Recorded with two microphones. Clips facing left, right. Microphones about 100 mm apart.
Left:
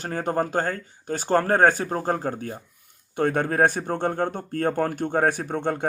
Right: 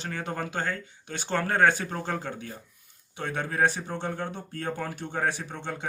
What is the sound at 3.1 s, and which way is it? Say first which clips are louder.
Speech: left 7 dB; 50° left (ahead or behind).